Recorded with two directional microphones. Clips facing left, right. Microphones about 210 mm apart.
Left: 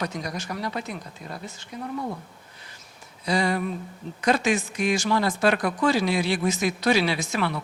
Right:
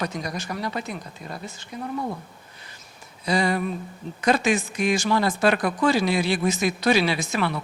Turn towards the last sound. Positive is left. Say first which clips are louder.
# right 1 dB
turn(degrees=-10)  # may be behind; listen again after turning